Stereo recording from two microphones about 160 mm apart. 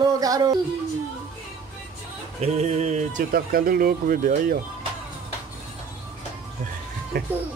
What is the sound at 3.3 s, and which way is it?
Speech, 65° right (ahead or behind).